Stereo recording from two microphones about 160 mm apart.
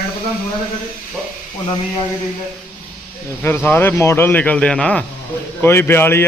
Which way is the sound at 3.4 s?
10° left (ahead or behind).